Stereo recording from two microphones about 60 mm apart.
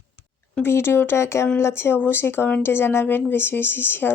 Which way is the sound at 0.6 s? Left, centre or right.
Left.